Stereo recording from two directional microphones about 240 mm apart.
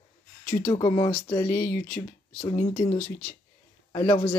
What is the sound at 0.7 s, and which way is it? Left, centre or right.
Speech, centre.